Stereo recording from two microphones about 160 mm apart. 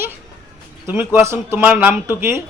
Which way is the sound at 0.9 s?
15° right (ahead or behind).